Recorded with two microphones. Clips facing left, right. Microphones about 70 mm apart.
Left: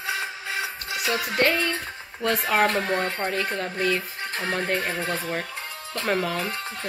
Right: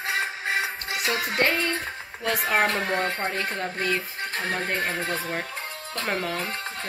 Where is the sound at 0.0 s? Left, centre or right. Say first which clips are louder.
Right 2 dB; right.